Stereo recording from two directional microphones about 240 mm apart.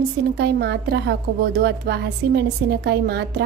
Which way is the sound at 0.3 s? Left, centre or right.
Right.